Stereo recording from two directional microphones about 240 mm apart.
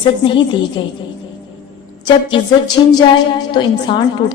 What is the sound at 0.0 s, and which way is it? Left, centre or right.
Speech, centre.